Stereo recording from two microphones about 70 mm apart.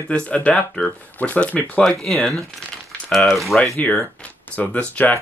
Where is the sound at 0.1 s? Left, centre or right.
Centre.